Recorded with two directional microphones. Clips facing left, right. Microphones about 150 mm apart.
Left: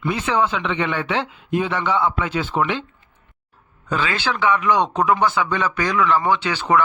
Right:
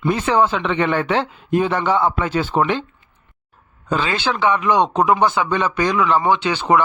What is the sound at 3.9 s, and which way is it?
Speech, 25° right (ahead or behind).